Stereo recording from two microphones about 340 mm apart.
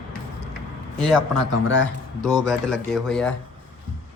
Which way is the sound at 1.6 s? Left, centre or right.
Left.